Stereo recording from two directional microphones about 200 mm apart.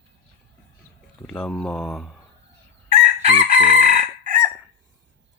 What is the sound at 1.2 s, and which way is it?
Speech, 5° left (ahead or behind).